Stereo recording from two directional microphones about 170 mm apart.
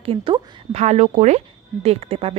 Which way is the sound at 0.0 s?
30° right (ahead or behind).